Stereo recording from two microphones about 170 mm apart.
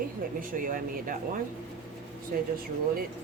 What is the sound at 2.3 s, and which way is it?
Speech, 60° right (ahead or behind).